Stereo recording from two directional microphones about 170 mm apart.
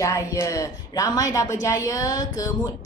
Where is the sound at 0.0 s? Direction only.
20° left (ahead or behind).